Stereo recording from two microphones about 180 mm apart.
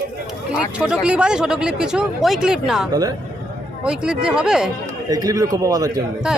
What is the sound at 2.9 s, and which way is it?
Speech, 20° right (ahead or behind).